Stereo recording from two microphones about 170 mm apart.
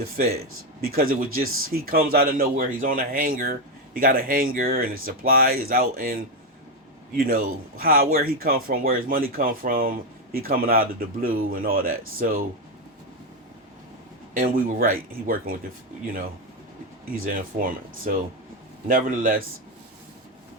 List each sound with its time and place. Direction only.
0.2 s speech: 65° right (ahead or behind)
14.3 s speech: 55° right (ahead or behind)
17.2 s a man's voice: 55° right (ahead or behind)